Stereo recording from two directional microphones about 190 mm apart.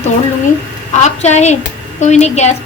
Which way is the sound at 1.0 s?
35° left (ahead or behind).